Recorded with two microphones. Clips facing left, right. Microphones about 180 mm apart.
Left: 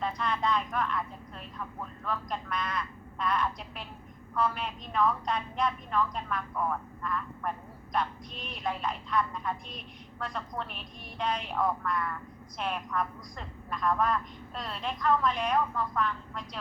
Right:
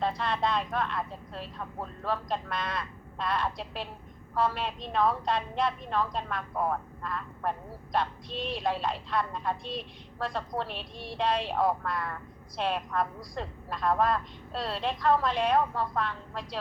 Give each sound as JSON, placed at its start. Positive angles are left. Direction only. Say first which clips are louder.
{"t": 0.0, "sound": "a woman's voice", "louder": "right 2 dB", "side_deg": -30}
{"t": 7.9, "sound": "a woman's voice", "louder": "right 2 dB", "side_deg": -30}